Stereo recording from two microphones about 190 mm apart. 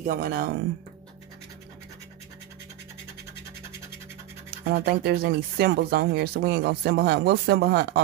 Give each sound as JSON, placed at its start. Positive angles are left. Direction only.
{"t": 0.0, "sound": "speech", "side_deg": -50}
{"t": 4.6, "sound": "speech", "side_deg": -50}